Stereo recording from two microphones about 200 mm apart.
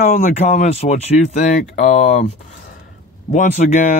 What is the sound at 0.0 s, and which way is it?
Speech, 35° left (ahead or behind).